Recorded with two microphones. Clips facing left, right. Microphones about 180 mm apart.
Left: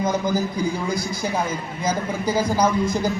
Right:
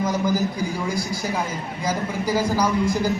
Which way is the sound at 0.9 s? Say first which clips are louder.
Left 1 dB; 20° left (ahead or behind).